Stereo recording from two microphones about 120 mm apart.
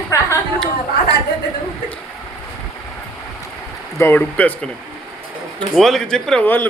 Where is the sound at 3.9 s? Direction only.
15° left (ahead or behind).